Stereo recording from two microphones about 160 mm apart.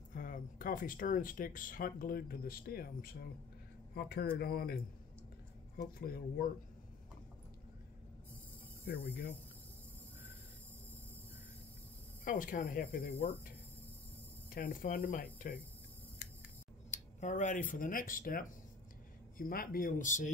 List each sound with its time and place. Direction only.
0.1 s speech: 60° left (ahead or behind)
3.9 s speech: 80° left
5.8 s speech: 70° left (ahead or behind)
8.8 s speech: 85° left
12.3 s speech: 60° left (ahead or behind)
14.5 s speech: 60° left (ahead or behind)
16.9 s speech: 50° left (ahead or behind)